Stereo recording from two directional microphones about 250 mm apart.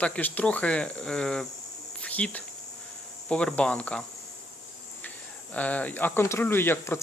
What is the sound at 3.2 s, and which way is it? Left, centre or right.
Speech, centre.